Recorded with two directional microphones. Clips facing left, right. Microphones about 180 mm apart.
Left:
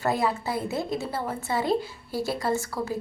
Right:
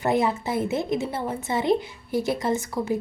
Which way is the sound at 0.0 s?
20° right (ahead or behind).